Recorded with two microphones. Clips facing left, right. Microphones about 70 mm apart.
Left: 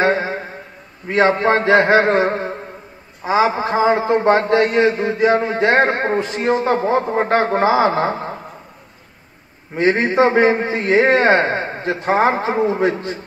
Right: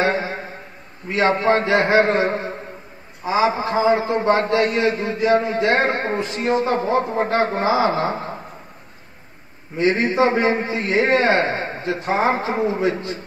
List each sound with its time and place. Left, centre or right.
0.0 s a sound: left
1.0 s a man's voice: left
9.8 s a man's voice: left